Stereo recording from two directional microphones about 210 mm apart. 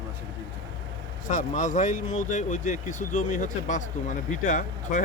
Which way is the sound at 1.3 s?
35° left (ahead or behind).